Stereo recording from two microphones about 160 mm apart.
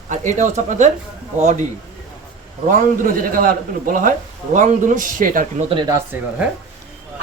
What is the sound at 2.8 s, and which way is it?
A man's voice, 60° right (ahead or behind).